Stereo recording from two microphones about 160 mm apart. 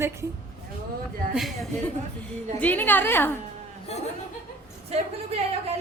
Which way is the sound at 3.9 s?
40° left (ahead or behind).